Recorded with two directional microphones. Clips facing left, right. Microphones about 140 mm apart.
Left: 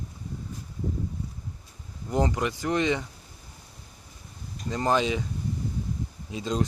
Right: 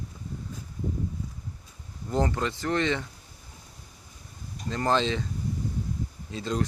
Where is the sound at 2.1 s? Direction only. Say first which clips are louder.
Left 1 dB; 15° left (ahead or behind).